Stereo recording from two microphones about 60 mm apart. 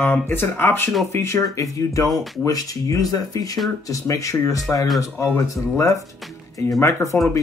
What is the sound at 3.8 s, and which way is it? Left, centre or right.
Speech, left.